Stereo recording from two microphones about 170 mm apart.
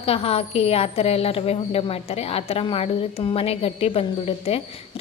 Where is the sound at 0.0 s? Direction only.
35° left (ahead or behind).